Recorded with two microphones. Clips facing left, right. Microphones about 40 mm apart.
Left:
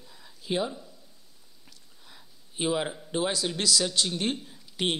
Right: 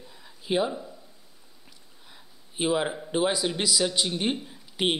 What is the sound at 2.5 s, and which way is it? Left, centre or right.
Speech, centre.